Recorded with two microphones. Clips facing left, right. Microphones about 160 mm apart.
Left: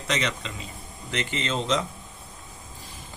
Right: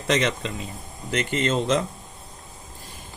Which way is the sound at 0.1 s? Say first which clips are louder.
Right 6 dB; 50° right (ahead or behind).